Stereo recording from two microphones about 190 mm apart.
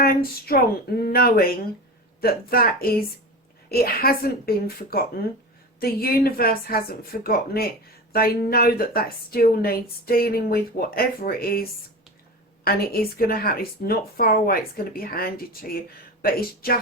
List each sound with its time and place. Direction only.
0.0 s speech: 50° left (ahead or behind)